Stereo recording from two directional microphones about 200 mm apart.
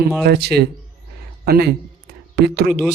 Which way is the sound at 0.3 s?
55° right (ahead or behind).